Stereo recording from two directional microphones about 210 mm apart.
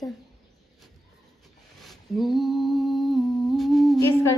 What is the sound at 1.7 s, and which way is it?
Humming, centre (ahead or behind).